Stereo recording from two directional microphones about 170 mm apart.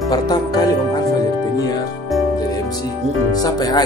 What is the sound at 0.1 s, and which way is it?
Speech, 20° left (ahead or behind).